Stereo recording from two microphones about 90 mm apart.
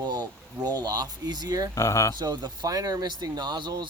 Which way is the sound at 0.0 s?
50° right (ahead or behind).